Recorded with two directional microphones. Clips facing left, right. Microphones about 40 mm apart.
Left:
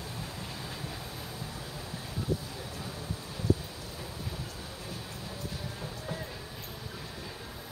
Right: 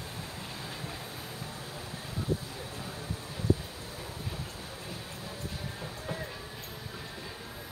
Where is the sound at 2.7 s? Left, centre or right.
Right.